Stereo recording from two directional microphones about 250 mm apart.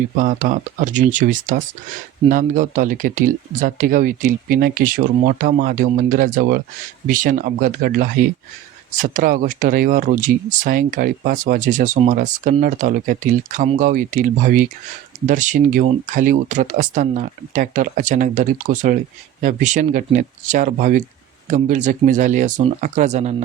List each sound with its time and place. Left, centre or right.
0.2 s speech: right